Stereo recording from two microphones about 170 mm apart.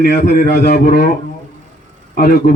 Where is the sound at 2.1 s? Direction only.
60° left (ahead or behind).